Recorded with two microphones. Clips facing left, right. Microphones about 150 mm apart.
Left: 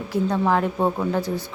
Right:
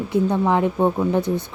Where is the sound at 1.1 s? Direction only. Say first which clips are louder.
Right 4 dB; 20° right (ahead or behind).